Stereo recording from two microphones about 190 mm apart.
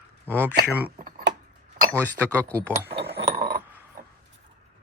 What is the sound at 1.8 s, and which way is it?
Chink, 45° right (ahead or behind).